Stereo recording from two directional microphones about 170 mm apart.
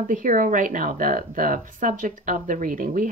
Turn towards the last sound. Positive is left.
turn(degrees=-55)  # may be behind; listen again after turning